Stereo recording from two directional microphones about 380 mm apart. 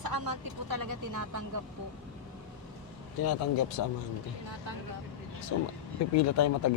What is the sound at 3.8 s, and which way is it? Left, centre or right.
Speech, left.